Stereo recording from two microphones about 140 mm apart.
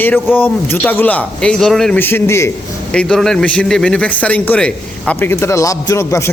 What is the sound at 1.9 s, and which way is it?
Speech, 15° left (ahead or behind).